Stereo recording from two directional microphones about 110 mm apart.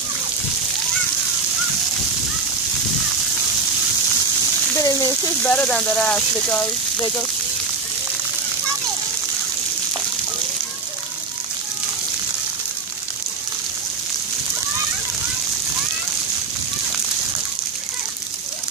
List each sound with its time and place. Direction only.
4.7 s a sound: 35° left (ahead or behind)
5.4 s speech: 15° left (ahead or behind)
6.5 s speech: 20° left (ahead or behind)